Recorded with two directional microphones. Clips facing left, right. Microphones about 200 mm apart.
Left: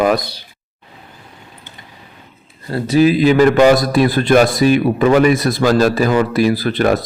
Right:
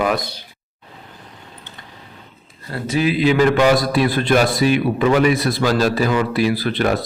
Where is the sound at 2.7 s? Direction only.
40° left (ahead or behind).